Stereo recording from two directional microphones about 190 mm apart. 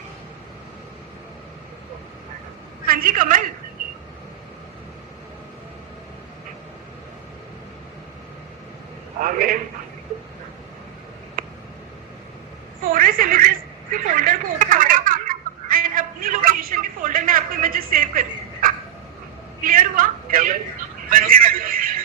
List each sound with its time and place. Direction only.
2.8 s a woman's voice: 50° right (ahead or behind)
9.2 s a man's voice: 50° right (ahead or behind)
12.8 s a sound: 50° right (ahead or behind)